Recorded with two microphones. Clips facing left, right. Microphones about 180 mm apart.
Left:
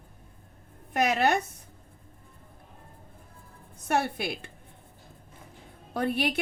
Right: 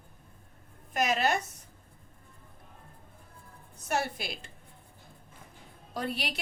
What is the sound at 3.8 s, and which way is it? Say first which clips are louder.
Speech: left 4 dB; 60° left (ahead or behind).